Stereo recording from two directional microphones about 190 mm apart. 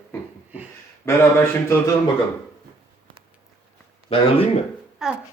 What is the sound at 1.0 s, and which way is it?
Speech, 15° left (ahead or behind).